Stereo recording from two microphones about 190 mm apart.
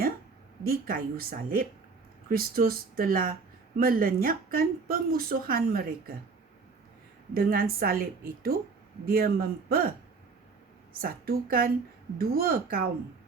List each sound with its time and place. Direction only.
0.6 s speech: 50° right (ahead or behind)
7.3 s speech: 50° right (ahead or behind)
11.0 s speech: 50° right (ahead or behind)